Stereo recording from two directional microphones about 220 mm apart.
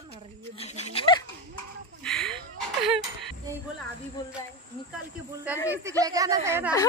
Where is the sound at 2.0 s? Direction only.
Centre (ahead or behind).